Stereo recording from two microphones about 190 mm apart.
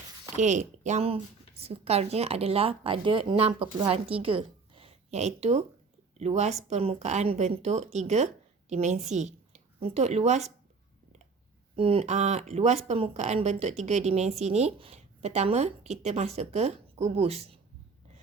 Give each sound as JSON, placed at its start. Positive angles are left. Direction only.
{"t": 0.3, "sound": "a woman's voice", "side_deg": -40}
{"t": 11.8, "sound": "speech", "side_deg": -30}